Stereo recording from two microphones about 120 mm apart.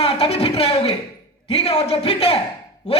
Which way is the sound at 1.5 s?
55° left (ahead or behind).